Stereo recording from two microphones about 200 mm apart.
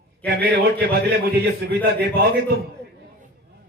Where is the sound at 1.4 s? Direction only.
55° right (ahead or behind).